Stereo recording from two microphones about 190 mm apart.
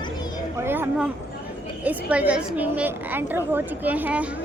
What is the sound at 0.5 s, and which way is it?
A woman's voice, 10° right (ahead or behind).